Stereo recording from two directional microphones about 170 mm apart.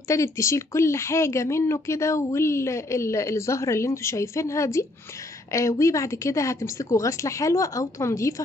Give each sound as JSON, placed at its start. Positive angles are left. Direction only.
{"t": 0.1, "sound": "speech", "side_deg": 15}